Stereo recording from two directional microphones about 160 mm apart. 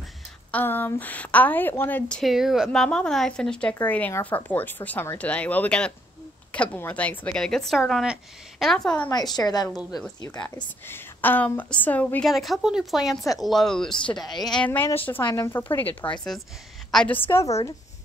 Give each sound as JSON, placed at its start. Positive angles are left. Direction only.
{"t": 0.5, "sound": "a woman's voice", "side_deg": 10}
{"t": 9.1, "sound": "a woman's voice", "side_deg": 25}
{"t": 9.7, "sound": "speech", "side_deg": 0}
{"t": 10.2, "sound": "a woman's voice", "side_deg": 25}
{"t": 10.9, "sound": "a woman's voice", "side_deg": 10}